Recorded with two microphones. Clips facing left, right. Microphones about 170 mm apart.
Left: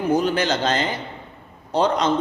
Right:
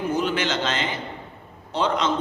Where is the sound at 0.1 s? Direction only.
40° left (ahead or behind).